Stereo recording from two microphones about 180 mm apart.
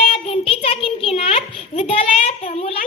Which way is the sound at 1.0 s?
30° left (ahead or behind).